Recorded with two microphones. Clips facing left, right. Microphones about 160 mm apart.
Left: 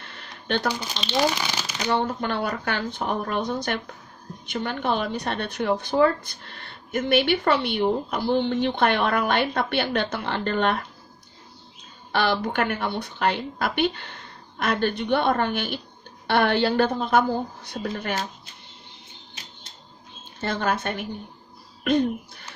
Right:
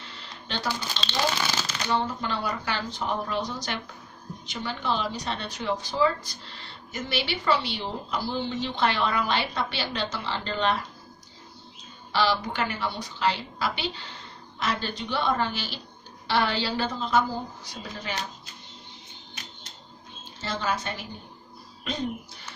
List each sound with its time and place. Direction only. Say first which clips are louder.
0.0 s a sound: left 1 dB; 55° left (ahead or behind)
0.7 s speech: left 4 dB; 15° left (ahead or behind)
1.9 s speech: left 4 dB; 60° left (ahead or behind)
12.1 s speech: left 2 dB; 55° left (ahead or behind)
20.3 s speech: left 4 dB; 55° left (ahead or behind)